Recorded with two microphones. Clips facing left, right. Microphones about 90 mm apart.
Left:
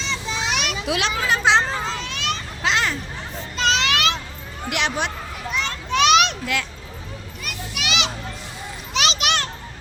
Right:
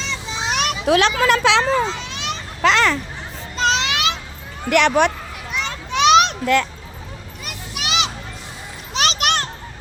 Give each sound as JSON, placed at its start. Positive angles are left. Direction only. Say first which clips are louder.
{"t": 0.4, "sound": "children playing", "louder": "right 7 dB", "side_deg": -45}
{"t": 1.1, "sound": "speech", "louder": "right 3 dB", "side_deg": -90}
{"t": 2.0, "sound": "a sound", "louder": "left 1 dB", "side_deg": -20}
{"t": 2.6, "sound": "a child's voice", "louder": "right 7 dB", "side_deg": -65}
{"t": 3.6, "sound": "a sound", "louder": "right 2 dB", "side_deg": -30}
{"t": 3.8, "sound": "a sound", "louder": "left 1 dB", "side_deg": -15}
{"t": 4.7, "sound": "speech", "louder": "right 9 dB", "side_deg": -60}
{"t": 5.5, "sound": "children playing", "louder": "even", "side_deg": -15}
{"t": 6.1, "sound": "children playing", "louder": "right 7 dB", "side_deg": -35}